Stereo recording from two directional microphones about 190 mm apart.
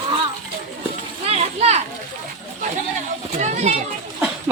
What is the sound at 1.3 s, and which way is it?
Children playing, 35° right (ahead or behind).